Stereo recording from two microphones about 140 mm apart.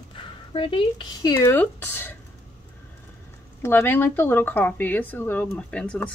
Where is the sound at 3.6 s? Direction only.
15° left (ahead or behind).